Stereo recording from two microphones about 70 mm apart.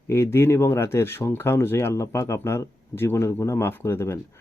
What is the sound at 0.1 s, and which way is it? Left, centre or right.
Speech, left.